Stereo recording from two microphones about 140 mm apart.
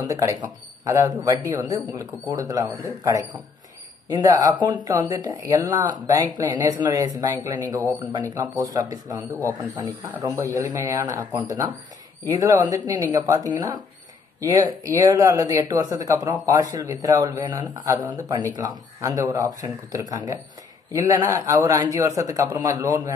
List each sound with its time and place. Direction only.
0.0 s speech: 20° right (ahead or behind)